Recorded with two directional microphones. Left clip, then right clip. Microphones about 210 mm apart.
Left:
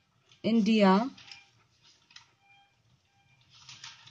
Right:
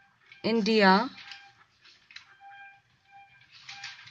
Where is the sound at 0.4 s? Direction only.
25° right (ahead or behind).